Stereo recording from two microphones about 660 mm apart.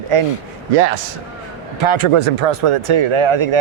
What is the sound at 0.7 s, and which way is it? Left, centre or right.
Speech, right.